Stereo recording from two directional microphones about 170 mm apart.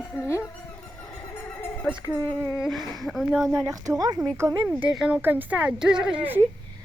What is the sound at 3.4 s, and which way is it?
A child's voice, 15° right (ahead or behind).